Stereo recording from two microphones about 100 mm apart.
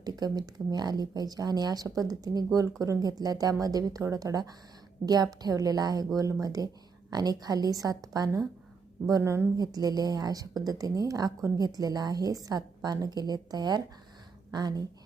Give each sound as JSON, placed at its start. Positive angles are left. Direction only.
{"t": 0.0, "sound": "a woman's voice", "side_deg": -40}
{"t": 9.6, "sound": "speech", "side_deg": -40}